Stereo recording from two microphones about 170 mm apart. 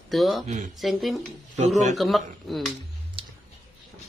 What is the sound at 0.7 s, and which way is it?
Speech, centre (ahead or behind).